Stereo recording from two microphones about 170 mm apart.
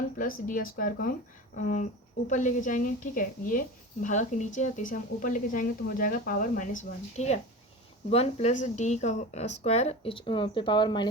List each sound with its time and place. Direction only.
0.2 s a woman's voice: 55° left (ahead or behind); by 11.1 s 25° left (ahead or behind)